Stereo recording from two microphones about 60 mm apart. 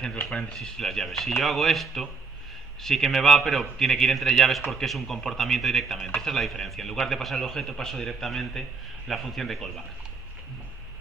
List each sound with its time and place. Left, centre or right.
0.6 s a man's voice: centre